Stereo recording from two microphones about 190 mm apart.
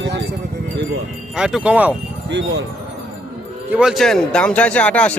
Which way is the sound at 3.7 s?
5° right (ahead or behind).